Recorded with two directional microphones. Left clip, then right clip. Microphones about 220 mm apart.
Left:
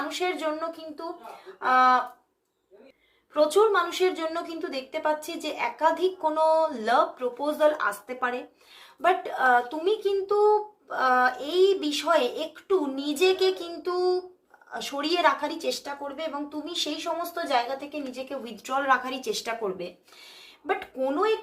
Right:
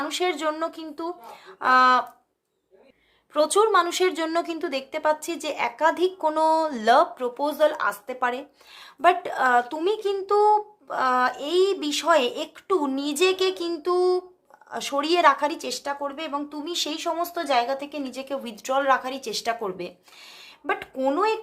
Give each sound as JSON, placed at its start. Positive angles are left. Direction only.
{"t": 0.1, "sound": "a woman's voice", "side_deg": -45}
{"t": 3.3, "sound": "a woman's voice", "side_deg": -45}